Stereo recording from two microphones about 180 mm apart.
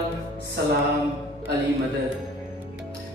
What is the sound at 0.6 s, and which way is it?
Music, 65° right (ahead or behind).